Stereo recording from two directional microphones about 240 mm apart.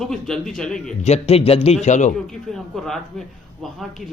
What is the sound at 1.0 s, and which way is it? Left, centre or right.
Speech, left.